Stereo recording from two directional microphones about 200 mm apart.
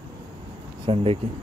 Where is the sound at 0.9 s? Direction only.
25° right (ahead or behind).